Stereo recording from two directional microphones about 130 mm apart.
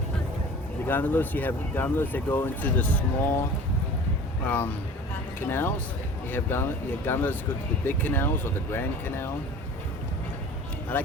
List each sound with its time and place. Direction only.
0.9 s speech: 15° left (ahead or behind)
4.4 s speech: 15° left (ahead or behind)
10.9 s speech: 15° left (ahead or behind)